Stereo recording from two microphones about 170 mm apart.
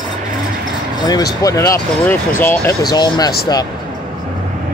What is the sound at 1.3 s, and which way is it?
Speech, 20° left (ahead or behind).